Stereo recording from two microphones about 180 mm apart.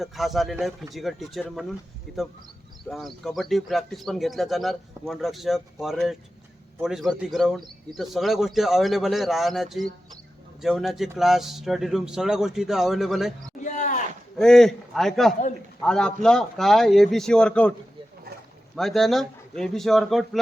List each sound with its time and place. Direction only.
0.0 s speech: centre (ahead or behind)
13.7 s a sound: 40° left (ahead or behind)
14.3 s speech: 5° left (ahead or behind)
18.8 s speech: centre (ahead or behind)